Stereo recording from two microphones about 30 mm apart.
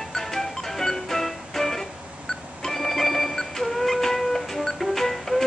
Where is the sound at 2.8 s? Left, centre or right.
Centre.